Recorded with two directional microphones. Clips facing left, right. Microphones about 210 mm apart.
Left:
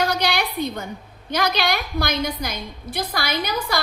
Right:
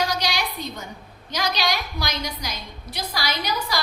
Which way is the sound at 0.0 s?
55° left (ahead or behind).